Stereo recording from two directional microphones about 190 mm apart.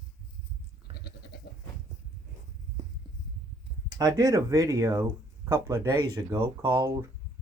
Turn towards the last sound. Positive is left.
turn(degrees=-20)  # may be behind; listen again after turning